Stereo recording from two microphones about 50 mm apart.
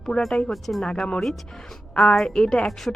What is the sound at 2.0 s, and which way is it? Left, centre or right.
Speech, centre.